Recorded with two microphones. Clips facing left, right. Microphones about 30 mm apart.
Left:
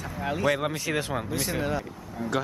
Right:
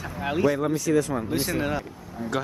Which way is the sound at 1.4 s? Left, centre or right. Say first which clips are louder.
Right 2 dB; centre.